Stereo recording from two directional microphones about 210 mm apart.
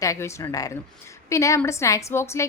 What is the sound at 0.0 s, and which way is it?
A woman's voice, 15° left (ahead or behind).